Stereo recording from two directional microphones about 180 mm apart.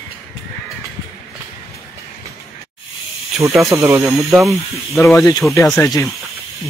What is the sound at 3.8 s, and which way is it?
Speech, 15° right (ahead or behind).